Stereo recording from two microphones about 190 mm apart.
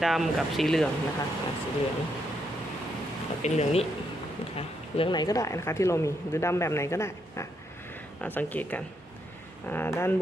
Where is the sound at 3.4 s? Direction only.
35° left (ahead or behind).